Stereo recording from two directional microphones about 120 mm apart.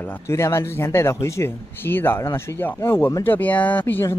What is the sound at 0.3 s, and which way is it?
Speech, 25° left (ahead or behind).